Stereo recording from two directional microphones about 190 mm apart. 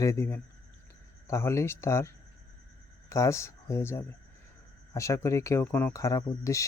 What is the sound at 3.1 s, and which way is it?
Speech, 15° left (ahead or behind).